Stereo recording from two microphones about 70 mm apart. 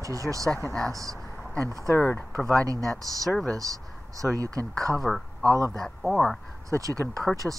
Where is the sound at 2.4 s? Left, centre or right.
Right.